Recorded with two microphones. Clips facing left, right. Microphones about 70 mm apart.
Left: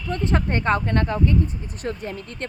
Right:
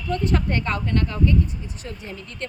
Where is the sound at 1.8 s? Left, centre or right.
Left.